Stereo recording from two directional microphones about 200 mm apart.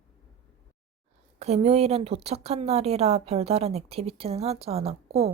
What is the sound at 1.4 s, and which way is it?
A woman's voice, 30° right (ahead or behind).